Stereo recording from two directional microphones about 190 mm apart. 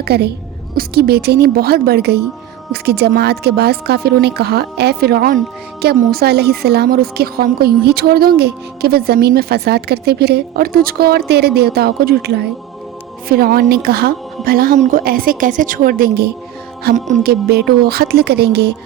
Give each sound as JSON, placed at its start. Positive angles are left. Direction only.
{"t": 0.0, "sound": "a woman's voice", "side_deg": -60}
{"t": 16.9, "sound": "speech", "side_deg": -40}
{"t": 17.5, "sound": "a woman's voice", "side_deg": -55}